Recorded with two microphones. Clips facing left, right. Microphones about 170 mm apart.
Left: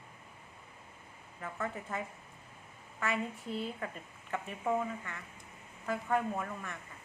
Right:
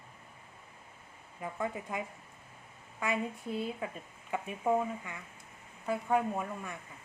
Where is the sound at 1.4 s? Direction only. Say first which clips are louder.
Right 3 dB; 15° right (ahead or behind).